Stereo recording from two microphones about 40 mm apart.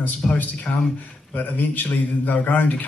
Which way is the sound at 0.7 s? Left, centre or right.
Left.